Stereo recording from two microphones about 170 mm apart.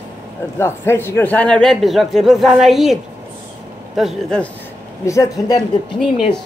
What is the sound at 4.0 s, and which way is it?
Speech, centre (ahead or behind).